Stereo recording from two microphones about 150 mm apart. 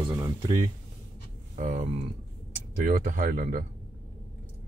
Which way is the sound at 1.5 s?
60° right (ahead or behind).